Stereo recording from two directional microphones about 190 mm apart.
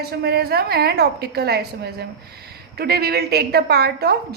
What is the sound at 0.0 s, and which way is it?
A woman's voice, 60° right (ahead or behind).